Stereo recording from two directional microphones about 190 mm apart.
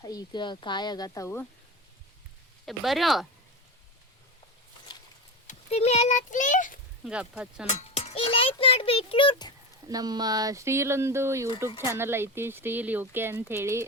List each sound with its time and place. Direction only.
0.0 s a child's voice: 20° left (ahead or behind)
2.6 s speech: centre (ahead or behind)
5.5 s speech: 35° left (ahead or behind)
7.0 s speech: 5° right (ahead or behind)
7.7 s a child's voice: 35° left (ahead or behind)
9.9 s speech: 20° right (ahead or behind)